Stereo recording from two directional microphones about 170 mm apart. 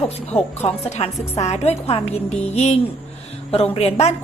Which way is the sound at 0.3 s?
40° left (ahead or behind).